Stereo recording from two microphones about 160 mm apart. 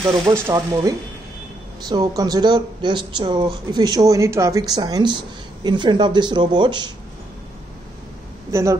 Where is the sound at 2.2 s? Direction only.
25° right (ahead or behind).